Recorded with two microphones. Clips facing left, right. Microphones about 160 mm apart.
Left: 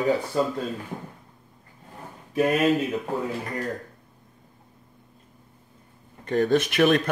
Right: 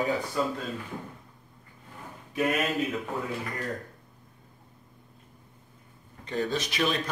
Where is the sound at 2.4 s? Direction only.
35° left (ahead or behind).